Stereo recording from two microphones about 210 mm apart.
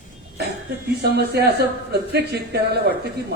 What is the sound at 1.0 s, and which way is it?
Speech, 50° right (ahead or behind).